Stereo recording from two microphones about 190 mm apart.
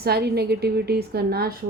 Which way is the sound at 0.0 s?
55° right (ahead or behind).